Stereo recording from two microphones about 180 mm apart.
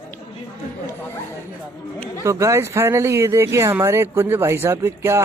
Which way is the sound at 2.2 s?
15° right (ahead or behind).